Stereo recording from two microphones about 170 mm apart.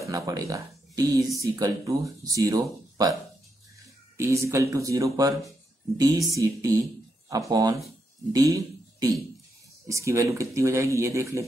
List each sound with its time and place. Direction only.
0.0 s speech: 20° right (ahead or behind)
4.2 s speech: 15° right (ahead or behind)